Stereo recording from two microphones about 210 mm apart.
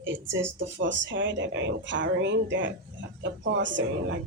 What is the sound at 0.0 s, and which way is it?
Speech, 60° right (ahead or behind).